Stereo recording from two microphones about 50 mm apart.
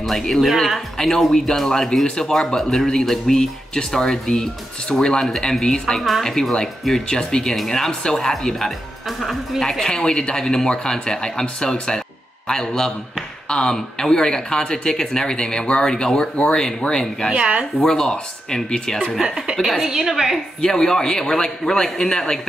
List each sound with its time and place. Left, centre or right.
0.0 s a woman's voice: centre
17.3 s speech: centre
17.8 s speech: centre
19.5 s a woman's voice: centre
20.6 s speech: centre